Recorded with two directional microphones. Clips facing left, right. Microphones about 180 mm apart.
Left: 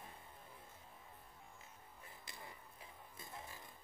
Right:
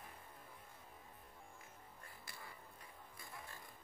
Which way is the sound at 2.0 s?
20° left (ahead or behind).